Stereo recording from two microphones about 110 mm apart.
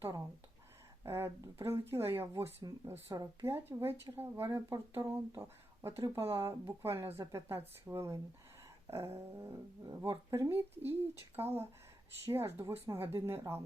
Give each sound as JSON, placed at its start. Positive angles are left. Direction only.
{"t": 1.0, "sound": "speech", "side_deg": -25}